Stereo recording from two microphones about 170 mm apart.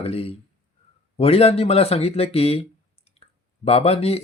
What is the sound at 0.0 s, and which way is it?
Speech, 35° left (ahead or behind).